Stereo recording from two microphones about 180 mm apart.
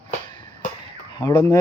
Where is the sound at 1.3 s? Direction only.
10° left (ahead or behind).